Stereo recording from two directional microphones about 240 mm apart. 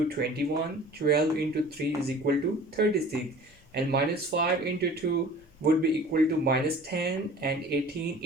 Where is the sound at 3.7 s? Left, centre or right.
Right.